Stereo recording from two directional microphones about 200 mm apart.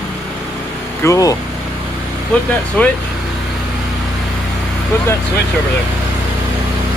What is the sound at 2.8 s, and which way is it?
Speech, 5° left (ahead or behind).